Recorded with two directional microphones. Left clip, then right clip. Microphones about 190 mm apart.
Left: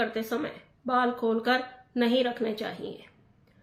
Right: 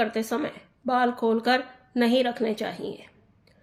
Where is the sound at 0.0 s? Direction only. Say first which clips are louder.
Right 3 dB; 45° right (ahead or behind).